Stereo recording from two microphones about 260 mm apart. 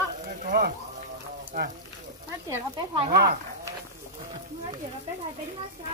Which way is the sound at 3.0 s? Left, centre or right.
Right.